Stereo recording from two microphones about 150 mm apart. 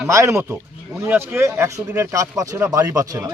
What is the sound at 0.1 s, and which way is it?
Speech, 20° right (ahead or behind).